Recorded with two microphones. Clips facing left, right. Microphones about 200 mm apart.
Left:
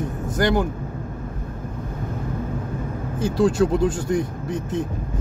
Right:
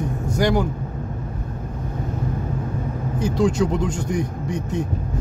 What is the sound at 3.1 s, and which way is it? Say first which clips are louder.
Speech: left 1 dB; 5° left (ahead or behind).